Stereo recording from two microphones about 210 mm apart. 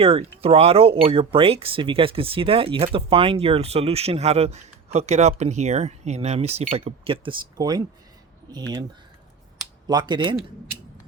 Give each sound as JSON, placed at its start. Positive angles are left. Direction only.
{"t": 0.0, "sound": "speech", "side_deg": -30}
{"t": 9.8, "sound": "speech", "side_deg": -20}